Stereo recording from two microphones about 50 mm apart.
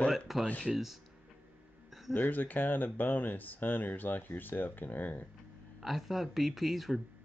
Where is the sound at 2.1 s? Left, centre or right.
Left.